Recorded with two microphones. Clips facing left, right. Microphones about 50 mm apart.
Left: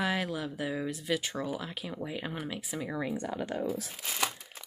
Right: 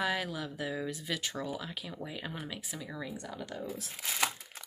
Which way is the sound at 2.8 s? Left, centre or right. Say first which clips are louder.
Left 10 dB; left.